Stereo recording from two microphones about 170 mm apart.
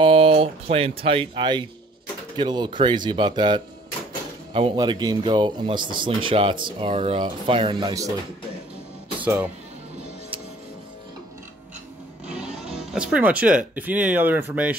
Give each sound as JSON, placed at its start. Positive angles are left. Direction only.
{"t": 0.0, "sound": "speech", "side_deg": -35}
{"t": 9.2, "sound": "speech", "side_deg": -10}
{"t": 12.3, "sound": "speech", "side_deg": -5}